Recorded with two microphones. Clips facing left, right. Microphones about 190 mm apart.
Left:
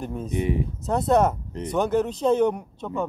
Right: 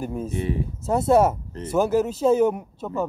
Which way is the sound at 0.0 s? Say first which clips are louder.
Right 3 dB; 5° right (ahead or behind).